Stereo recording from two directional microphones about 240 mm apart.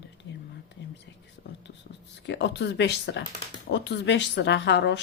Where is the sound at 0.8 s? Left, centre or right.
Left.